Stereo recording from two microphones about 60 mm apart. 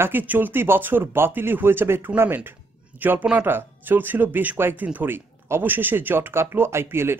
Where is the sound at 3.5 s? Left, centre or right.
Right.